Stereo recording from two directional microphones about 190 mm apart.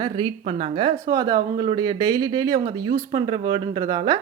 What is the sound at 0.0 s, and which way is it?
Speech, 30° right (ahead or behind).